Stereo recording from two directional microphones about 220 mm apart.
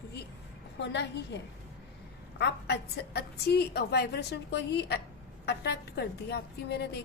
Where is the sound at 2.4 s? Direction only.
50° left (ahead or behind).